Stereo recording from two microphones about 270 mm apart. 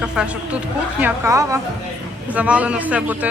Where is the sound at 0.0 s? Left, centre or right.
Centre.